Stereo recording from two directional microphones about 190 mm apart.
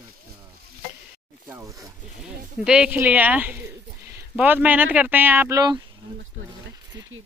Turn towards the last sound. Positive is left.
turn(degrees=-20)  # may be behind; listen again after turning